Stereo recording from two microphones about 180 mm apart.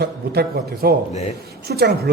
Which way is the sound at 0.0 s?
60° right (ahead or behind).